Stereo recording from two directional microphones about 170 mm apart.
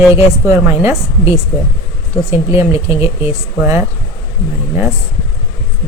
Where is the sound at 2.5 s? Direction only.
15° right (ahead or behind).